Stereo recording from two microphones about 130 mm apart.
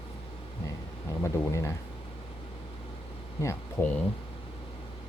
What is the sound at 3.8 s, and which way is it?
Speech, 20° left (ahead or behind).